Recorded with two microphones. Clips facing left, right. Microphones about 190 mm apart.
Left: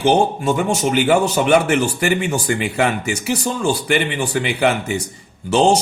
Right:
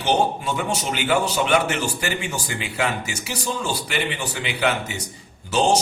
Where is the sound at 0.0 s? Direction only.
50° left (ahead or behind).